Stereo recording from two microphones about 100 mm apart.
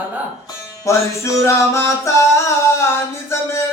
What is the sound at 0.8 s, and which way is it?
Music, 30° left (ahead or behind).